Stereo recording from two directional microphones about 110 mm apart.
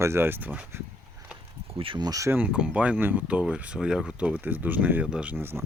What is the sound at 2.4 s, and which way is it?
Speech, 10° right (ahead or behind).